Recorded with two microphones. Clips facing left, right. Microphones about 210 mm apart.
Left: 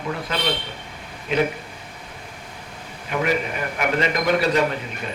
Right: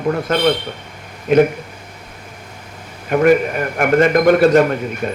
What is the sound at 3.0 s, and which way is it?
Speech, 50° right (ahead or behind).